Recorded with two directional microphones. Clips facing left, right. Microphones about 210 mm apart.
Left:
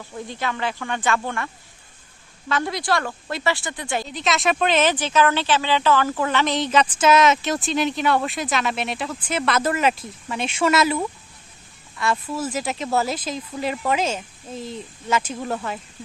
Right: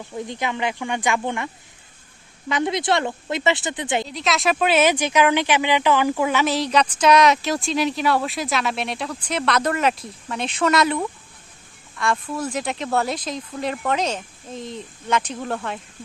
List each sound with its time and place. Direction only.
0.3 s speech: 15° right (ahead or behind)
2.5 s a woman's voice: 20° right (ahead or behind)
4.0 s speech: centre (ahead or behind)